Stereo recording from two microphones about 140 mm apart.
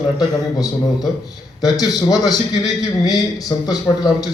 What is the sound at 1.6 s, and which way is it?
A man's voice, 30° left (ahead or behind).